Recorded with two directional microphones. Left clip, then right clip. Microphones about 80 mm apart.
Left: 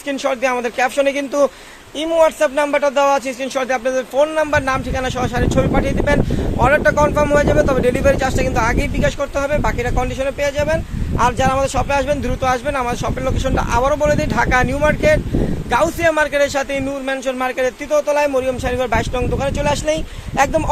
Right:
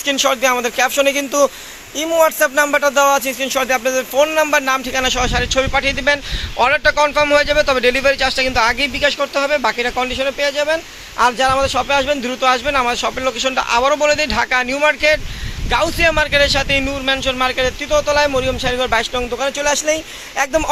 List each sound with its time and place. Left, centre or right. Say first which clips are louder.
0.1 s speech: right 3 dB; left
7.0 s speech: right 1 dB; centre
7.3 s speech: right 1 dB; left
18.3 s speech: right 1 dB; left